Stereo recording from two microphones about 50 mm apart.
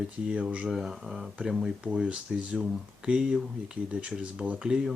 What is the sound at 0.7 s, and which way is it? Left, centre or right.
Speech, centre.